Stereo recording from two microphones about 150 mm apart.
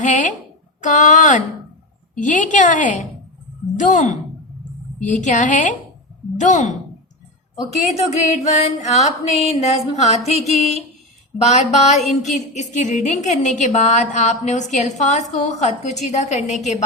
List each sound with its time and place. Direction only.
0.0 s a woman's voice: 55° left (ahead or behind)
7.9 s a woman's voice: 45° left (ahead or behind)